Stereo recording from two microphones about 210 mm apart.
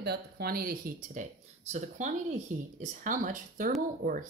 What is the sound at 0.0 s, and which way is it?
Speech, 50° right (ahead or behind).